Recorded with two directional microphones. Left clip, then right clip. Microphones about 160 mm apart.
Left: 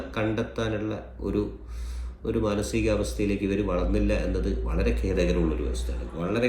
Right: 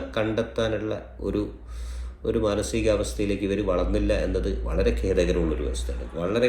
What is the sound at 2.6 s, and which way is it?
Speech, 45° right (ahead or behind).